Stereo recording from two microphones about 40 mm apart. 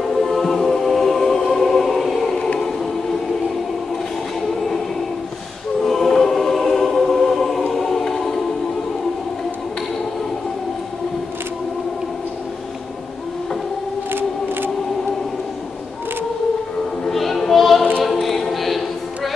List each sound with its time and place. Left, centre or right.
0.1 s music: centre
5.8 s choir: centre
14.1 s a sound: right
17.1 s music: centre
18.0 s choir: centre
18.5 s music: centre